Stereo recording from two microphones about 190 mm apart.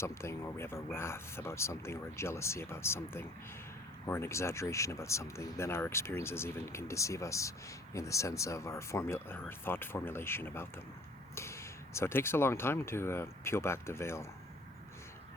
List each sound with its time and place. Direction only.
0.0 s speech: 15° left (ahead or behind)